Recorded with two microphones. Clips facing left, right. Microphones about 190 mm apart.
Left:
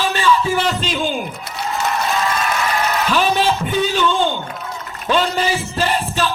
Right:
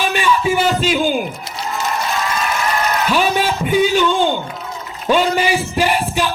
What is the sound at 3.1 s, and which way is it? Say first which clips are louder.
Speech: left 1 dB; 10° right (ahead or behind).